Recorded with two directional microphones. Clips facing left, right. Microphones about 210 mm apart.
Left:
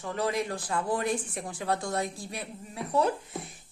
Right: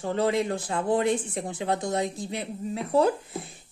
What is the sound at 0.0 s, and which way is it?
A woman's voice, 25° right (ahead or behind).